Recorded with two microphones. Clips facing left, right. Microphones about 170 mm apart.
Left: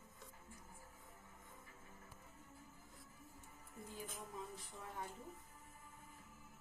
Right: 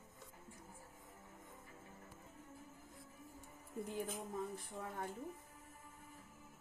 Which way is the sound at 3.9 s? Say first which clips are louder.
Right 6 dB; 60° right (ahead or behind).